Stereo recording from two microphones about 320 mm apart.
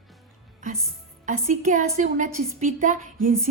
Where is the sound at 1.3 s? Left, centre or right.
Right.